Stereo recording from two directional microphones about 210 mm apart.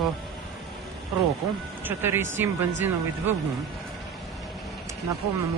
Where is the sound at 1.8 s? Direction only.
10° right (ahead or behind).